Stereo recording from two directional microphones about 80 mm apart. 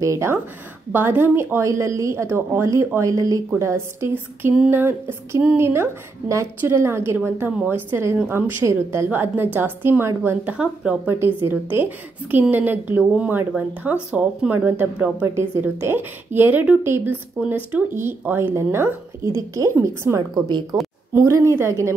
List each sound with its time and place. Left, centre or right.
0.0 s a woman's voice: right
10.4 s a woman's voice: centre
11.1 s a woman's voice: right
15.2 s a woman's voice: right
20.2 s a woman's voice: right
21.1 s a woman's voice: right